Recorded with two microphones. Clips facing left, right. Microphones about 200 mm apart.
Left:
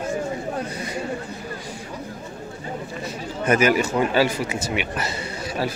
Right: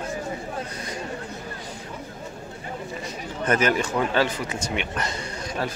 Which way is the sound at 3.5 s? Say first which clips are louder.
Left 4 dB; 10° left (ahead or behind).